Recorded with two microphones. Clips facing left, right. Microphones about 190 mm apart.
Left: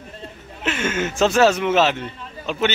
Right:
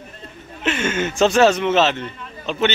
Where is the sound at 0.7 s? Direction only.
5° left (ahead or behind).